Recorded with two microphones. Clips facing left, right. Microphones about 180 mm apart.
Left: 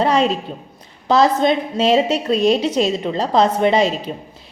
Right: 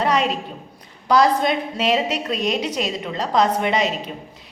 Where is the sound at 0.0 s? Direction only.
30° left (ahead or behind).